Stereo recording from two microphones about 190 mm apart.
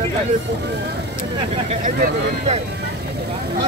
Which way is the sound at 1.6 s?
40° right (ahead or behind).